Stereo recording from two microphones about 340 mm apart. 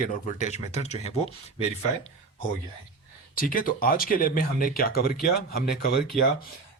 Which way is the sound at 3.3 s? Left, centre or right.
Left.